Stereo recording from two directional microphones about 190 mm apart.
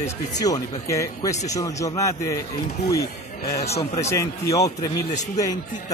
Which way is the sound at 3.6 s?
35° left (ahead or behind).